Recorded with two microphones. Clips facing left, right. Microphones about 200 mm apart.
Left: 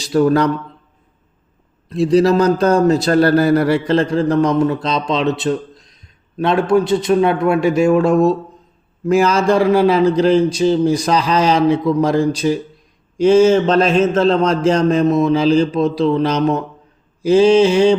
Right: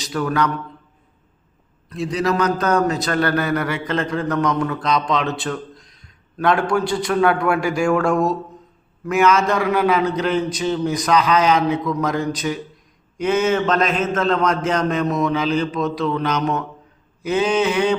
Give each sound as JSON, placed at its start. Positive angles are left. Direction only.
{"t": 0.0, "sound": "a man's voice", "side_deg": 30}
{"t": 1.9, "sound": "a man's voice", "side_deg": 30}